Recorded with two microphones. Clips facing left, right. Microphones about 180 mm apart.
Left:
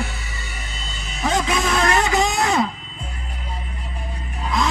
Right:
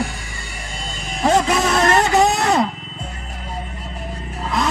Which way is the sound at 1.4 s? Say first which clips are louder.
Right 3 dB; 40° right (ahead or behind).